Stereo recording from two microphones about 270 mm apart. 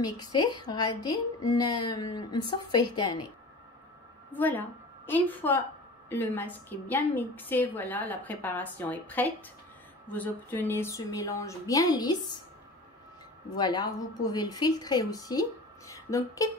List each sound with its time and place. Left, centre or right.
0.0 s a woman's voice: centre
4.3 s a woman's voice: centre
13.6 s a woman's voice: centre
15.9 s a sound: centre